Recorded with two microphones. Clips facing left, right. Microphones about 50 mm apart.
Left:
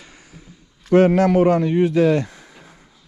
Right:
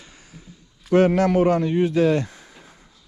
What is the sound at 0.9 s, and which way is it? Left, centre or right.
Speech, left.